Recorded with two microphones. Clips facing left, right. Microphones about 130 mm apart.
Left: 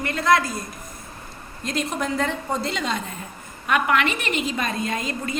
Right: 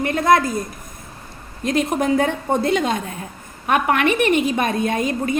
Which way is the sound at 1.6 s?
55° right (ahead or behind).